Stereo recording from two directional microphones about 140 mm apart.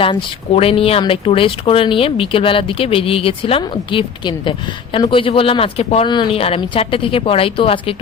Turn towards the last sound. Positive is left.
turn(degrees=40)  # may be behind; listen again after turning